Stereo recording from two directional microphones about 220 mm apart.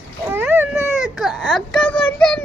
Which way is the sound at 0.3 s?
10° right (ahead or behind).